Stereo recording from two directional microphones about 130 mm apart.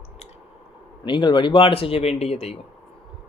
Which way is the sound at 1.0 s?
35° left (ahead or behind).